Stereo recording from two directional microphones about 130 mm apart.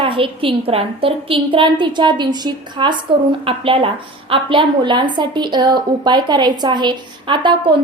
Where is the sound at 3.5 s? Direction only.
45° right (ahead or behind).